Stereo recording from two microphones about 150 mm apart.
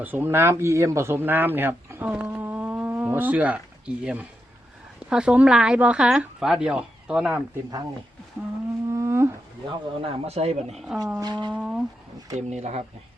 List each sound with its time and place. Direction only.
0.0 s speech: 15° right (ahead or behind)
2.3 s a sound: 10° right (ahead or behind)
5.0 s speech: 5° right (ahead or behind)
8.9 s whale vocalization: 20° right (ahead or behind)
9.6 s speech: 40° right (ahead or behind)
10.8 s speech: 5° right (ahead or behind)
11.2 s speech: 30° right (ahead or behind)
11.5 s a sound: 5° right (ahead or behind)
12.5 s speech: 50° right (ahead or behind)